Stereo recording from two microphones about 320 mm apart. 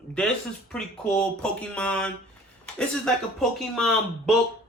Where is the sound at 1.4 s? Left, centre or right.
Centre.